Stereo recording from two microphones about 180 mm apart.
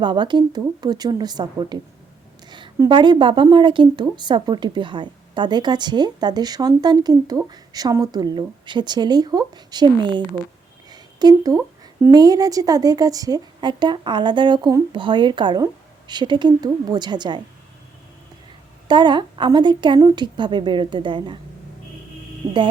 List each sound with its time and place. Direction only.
0.0 s a woman's voice: 25° right (ahead or behind)
10.8 s a sound: 20° right (ahead or behind)
12.1 s a woman's voice: 20° right (ahead or behind)
18.9 s a woman's voice: 25° right (ahead or behind)